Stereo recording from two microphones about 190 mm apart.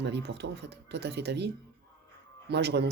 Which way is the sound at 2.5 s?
60° right (ahead or behind).